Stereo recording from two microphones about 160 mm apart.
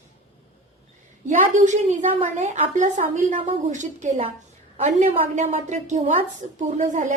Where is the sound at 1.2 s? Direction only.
50° right (ahead or behind).